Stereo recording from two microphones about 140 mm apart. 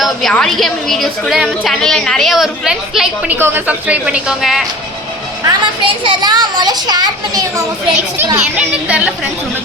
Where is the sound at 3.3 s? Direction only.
15° right (ahead or behind).